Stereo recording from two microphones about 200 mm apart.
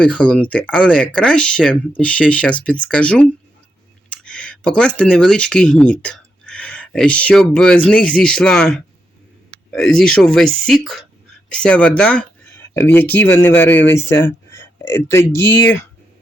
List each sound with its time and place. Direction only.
0.0 s speech: 5° left (ahead or behind)